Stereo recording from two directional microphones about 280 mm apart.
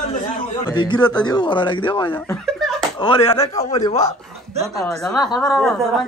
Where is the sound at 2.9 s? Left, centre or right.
Centre.